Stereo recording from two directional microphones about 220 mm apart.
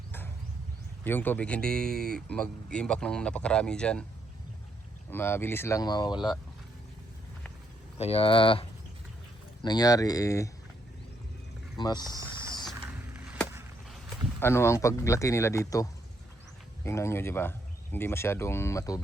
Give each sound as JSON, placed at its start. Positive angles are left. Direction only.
{"t": 1.0, "sound": "speech", "side_deg": 10}
{"t": 5.1, "sound": "speech", "side_deg": 10}
{"t": 7.9, "sound": "speech", "side_deg": 25}
{"t": 9.6, "sound": "speech", "side_deg": 15}
{"t": 11.8, "sound": "speech", "side_deg": 20}
{"t": 12.7, "sound": "mechanisms", "side_deg": -10}
{"t": 14.3, "sound": "speech", "side_deg": 10}